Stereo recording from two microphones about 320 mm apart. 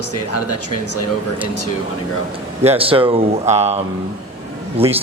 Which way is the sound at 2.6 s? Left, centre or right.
Centre.